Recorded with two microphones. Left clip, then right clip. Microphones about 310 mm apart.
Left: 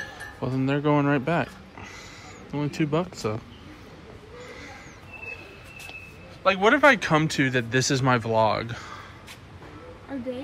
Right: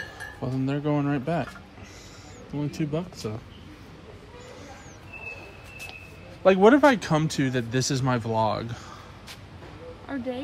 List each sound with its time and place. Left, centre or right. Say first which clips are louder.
0.4 s speech: left 4 dB; centre
2.5 s speech: left 4 dB; centre
6.4 s speech: right 1 dB; centre